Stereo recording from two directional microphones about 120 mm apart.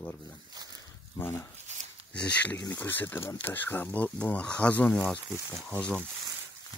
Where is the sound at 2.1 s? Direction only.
10° left (ahead or behind).